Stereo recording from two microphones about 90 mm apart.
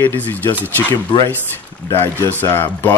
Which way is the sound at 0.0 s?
25° left (ahead or behind).